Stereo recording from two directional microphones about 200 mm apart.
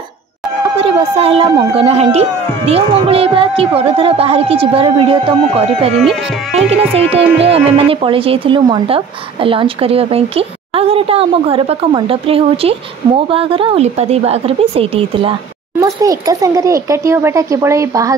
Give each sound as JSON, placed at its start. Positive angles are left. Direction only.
{"t": 0.7, "sound": "speech", "side_deg": -30}
{"t": 7.1, "sound": "speech", "side_deg": -30}
{"t": 15.8, "sound": "speech", "side_deg": -15}